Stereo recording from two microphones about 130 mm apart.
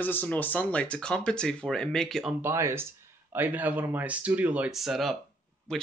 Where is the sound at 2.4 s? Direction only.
20° right (ahead or behind).